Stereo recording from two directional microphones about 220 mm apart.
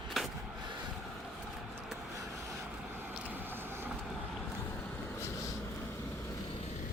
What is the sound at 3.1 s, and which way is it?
Vehicle, 10° right (ahead or behind).